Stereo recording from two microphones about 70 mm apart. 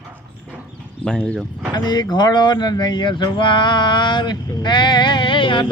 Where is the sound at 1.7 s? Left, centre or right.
Left.